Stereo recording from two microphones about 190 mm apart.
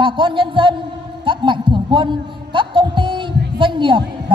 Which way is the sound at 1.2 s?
25° right (ahead or behind).